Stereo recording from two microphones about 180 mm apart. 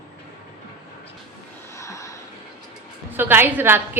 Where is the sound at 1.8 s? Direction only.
15° left (ahead or behind).